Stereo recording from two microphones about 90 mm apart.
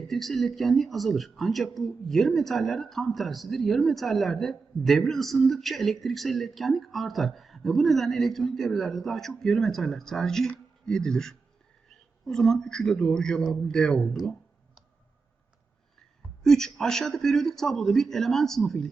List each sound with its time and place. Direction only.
0.1 s a man's voice: centre (ahead or behind)
16.4 s speech: 5° left (ahead or behind)